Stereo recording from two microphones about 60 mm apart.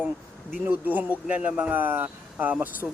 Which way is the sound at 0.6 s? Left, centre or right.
Right.